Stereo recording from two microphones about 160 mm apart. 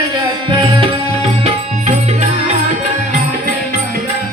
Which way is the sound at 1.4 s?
45° right (ahead or behind).